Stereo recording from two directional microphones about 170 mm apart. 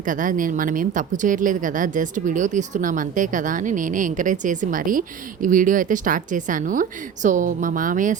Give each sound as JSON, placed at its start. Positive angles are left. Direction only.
{"t": 0.0, "sound": "speech", "side_deg": -50}